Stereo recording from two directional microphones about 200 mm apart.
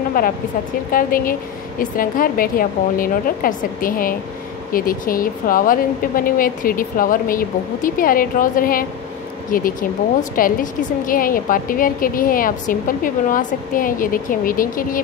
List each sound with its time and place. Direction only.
0.9 s a woman's voice: 45° left (ahead or behind)